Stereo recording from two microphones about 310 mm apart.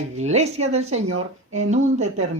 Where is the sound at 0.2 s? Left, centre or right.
Right.